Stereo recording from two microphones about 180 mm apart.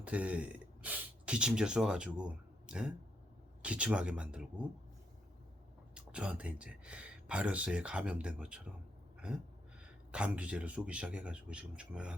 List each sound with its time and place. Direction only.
0.0 s speech: 5° right (ahead or behind)
5.9 s speech: 5° right (ahead or behind)
10.1 s speech: 5° right (ahead or behind)